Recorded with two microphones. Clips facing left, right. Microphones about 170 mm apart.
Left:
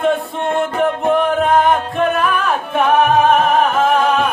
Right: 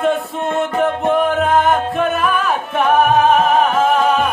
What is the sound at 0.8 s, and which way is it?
Music, centre (ahead or behind).